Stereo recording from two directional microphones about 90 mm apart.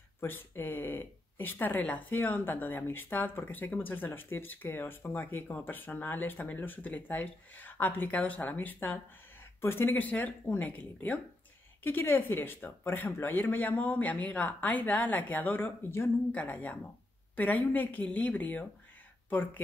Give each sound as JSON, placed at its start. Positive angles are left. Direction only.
{"t": 0.2, "sound": "speech", "side_deg": 25}